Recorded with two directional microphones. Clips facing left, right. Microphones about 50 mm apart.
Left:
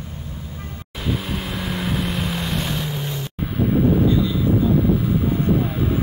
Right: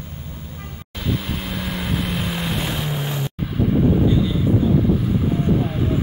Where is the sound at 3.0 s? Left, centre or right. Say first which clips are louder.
Right 3 dB; right.